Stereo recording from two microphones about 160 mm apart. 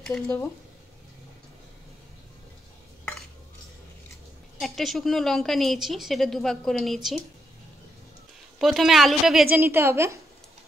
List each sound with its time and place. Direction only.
4.6 s a woman's voice: centre (ahead or behind)
8.5 s a woman's voice: centre (ahead or behind)
9.5 s a woman's voice: 15° right (ahead or behind)